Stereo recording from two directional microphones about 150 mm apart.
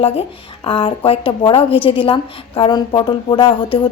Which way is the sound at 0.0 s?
40° left (ahead or behind).